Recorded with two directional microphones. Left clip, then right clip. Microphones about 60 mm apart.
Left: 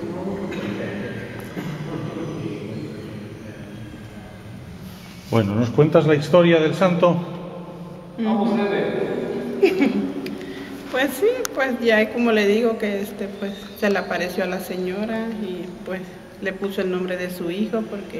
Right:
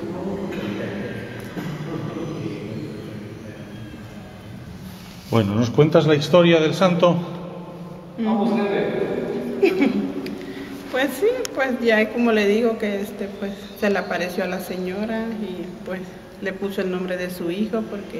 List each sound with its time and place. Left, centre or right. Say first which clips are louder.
5.3 s speech: even; right
5.9 s a man's voice: even; centre
8.2 s a woman's voice: even; centre
8.6 s a sound: even; centre
10.9 s a woman's voice: left 1 dB; centre